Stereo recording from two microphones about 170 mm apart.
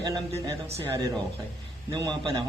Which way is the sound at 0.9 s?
20° right (ahead or behind).